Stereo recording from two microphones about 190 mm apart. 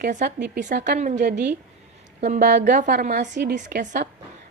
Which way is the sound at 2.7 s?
50° right (ahead or behind).